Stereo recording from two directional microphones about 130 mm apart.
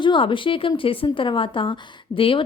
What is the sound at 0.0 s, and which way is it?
A woman's voice, 40° left (ahead or behind).